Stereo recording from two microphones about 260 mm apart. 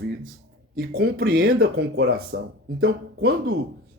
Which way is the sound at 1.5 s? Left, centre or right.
Right.